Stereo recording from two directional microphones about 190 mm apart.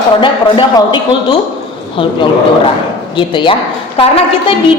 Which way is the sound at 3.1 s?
25° left (ahead or behind).